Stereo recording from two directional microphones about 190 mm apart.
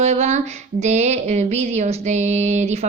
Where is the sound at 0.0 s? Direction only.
35° right (ahead or behind).